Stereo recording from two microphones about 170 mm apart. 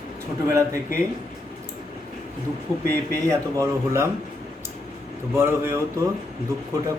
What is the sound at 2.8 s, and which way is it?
A man's voice, 15° right (ahead or behind).